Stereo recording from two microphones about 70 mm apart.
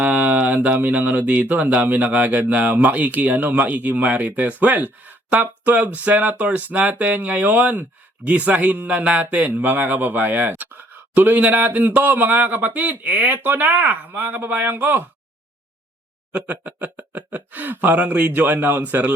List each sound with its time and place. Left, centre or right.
0.0 s speech: right
16.3 s speech: right